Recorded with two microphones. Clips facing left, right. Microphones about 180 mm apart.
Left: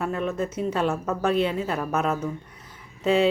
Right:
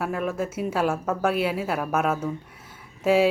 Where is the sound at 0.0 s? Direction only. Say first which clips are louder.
Even; 5° right (ahead or behind).